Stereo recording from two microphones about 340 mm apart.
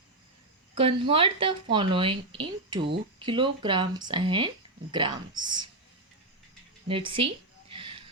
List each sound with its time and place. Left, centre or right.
0.8 s speech: centre
6.8 s speech: centre
7.7 s a sound: centre